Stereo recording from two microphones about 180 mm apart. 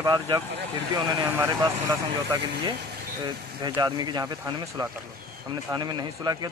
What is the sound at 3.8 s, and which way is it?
A man's voice, 25° right (ahead or behind).